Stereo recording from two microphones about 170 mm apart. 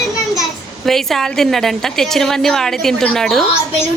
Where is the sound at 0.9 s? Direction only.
Centre (ahead or behind).